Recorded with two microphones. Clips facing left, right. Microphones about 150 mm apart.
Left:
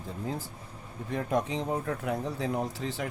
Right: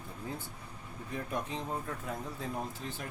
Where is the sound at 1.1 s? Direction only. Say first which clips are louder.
Left 8 dB; 90° left.